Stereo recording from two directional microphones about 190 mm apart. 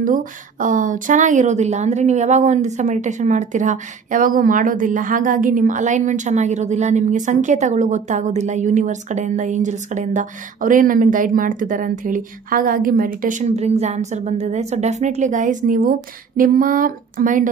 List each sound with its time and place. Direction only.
0.0 s a woman's voice: 45° right (ahead or behind)